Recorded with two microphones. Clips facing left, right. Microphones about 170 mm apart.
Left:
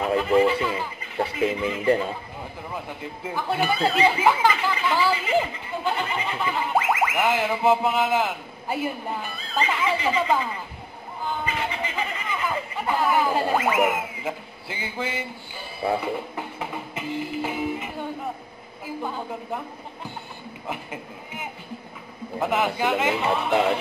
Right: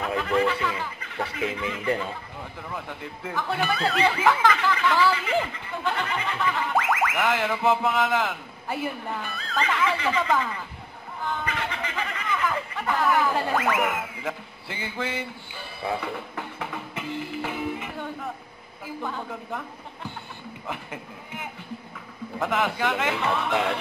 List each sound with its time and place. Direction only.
0.0 s speech: 15° left (ahead or behind)
2.7 s speech: 10° left (ahead or behind)
11.4 s a sound: 10° left (ahead or behind)
13.2 s speech: 15° left (ahead or behind)
19.0 s speech: 10° left (ahead or behind)
22.4 s speech: 10° left (ahead or behind)